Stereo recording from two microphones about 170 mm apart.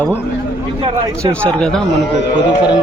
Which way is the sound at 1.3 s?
5° left (ahead or behind).